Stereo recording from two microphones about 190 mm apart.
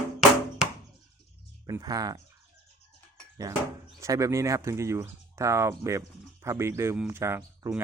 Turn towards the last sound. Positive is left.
turn(degrees=-15)  # may be behind; listen again after turning